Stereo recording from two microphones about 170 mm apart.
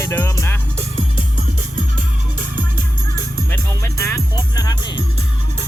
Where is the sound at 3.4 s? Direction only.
15° left (ahead or behind).